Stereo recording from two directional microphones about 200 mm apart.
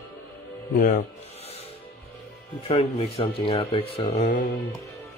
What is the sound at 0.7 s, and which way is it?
Speech, 45° left (ahead or behind).